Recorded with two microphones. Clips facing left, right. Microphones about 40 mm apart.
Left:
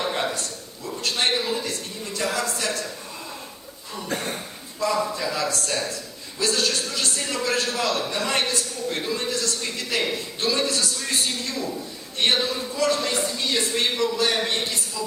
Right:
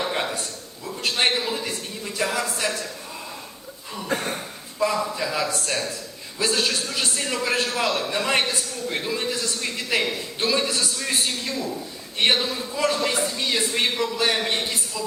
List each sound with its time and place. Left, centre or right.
0.0 s a sound: centre
1.3 s a man's voice: centre
3.9 s cough: centre
4.8 s a man's voice: right
5.1 s a man's voice: centre
11.5 s a man's voice: centre
12.7 s a man's voice: centre